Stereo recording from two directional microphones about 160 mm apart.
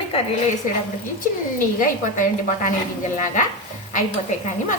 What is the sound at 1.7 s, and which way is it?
Speech, 55° left (ahead or behind).